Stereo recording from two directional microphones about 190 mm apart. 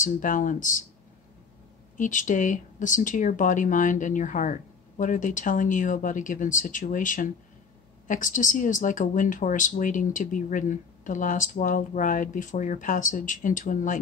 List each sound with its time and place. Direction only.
0.0 s speech: 45° left (ahead or behind)
2.0 s speech: 40° left (ahead or behind)